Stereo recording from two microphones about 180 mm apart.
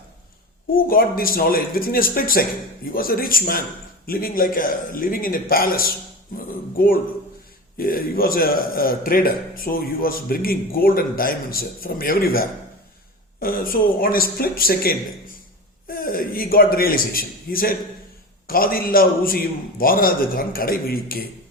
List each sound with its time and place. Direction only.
0.9 s a man's voice: 55° left (ahead or behind)